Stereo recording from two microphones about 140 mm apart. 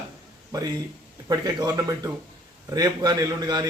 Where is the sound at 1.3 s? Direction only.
30° right (ahead or behind).